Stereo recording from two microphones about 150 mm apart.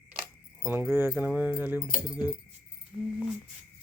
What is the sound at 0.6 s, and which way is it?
Speech, 10° right (ahead or behind).